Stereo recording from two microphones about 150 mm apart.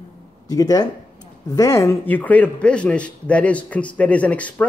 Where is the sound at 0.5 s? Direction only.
25° left (ahead or behind).